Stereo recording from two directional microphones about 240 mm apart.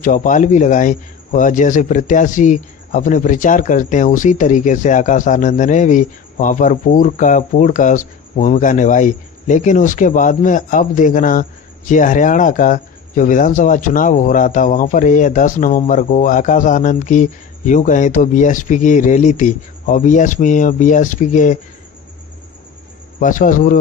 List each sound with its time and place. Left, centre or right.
0.0 s speech: left
23.2 s speech: left